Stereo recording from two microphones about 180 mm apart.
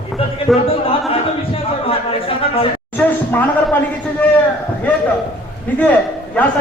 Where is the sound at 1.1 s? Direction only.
30° left (ahead or behind).